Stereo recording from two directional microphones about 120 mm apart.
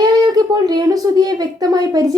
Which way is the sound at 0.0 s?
35° right (ahead or behind).